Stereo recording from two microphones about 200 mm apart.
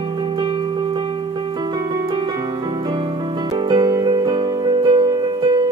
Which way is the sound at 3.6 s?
20° right (ahead or behind).